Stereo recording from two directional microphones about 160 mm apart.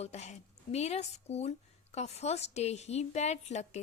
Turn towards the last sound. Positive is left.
turn(degrees=45)  # may be behind; listen again after turning